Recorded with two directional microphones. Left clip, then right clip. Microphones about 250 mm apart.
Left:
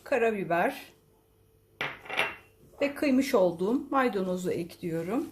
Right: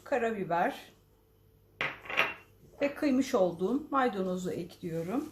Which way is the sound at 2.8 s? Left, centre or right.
Left.